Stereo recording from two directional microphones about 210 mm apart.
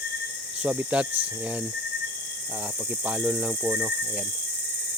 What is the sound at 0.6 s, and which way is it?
Speech, 5° right (ahead or behind).